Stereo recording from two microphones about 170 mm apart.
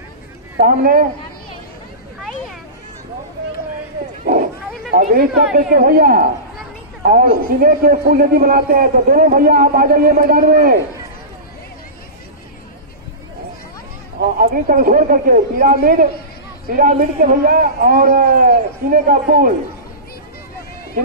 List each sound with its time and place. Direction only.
0.6 s a man's voice: 55° right (ahead or behind)
4.2 s sheep: 55° right (ahead or behind)
4.9 s a man's voice: 60° right (ahead or behind)
14.2 s a man's voice: 55° right (ahead or behind)